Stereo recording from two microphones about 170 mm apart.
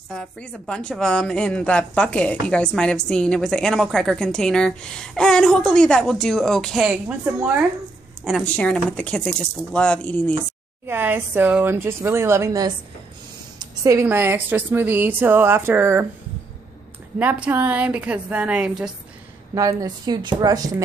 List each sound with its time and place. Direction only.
0.1 s a woman's voice: 5° left (ahead or behind)
10.9 s a woman's voice: 10° right (ahead or behind)
17.2 s a woman's voice: 10° right (ahead or behind)
19.5 s a woman's voice: 20° right (ahead or behind)